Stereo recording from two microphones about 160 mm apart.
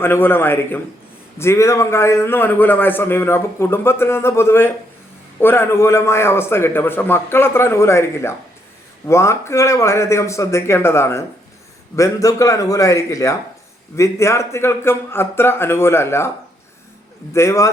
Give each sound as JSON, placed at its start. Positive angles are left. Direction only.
{"t": 0.0, "sound": "a man's voice", "side_deg": 15}
{"t": 17.3, "sound": "a man's voice", "side_deg": 15}